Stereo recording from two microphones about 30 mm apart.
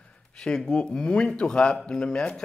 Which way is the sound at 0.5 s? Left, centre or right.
Left.